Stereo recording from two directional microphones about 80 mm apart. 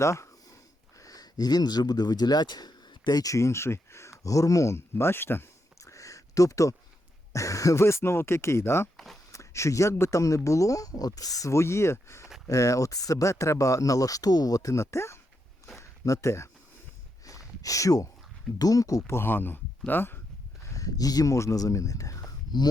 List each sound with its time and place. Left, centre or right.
0.0 s speech: left
5.8 s a sound: left
7.3 s speech: left
15.8 s a sound: left
18.6 s speech: left
19.1 s speech: left
20.7 s speech: left